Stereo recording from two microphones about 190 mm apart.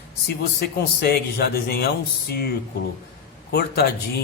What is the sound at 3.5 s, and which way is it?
Speech, 55° left (ahead or behind).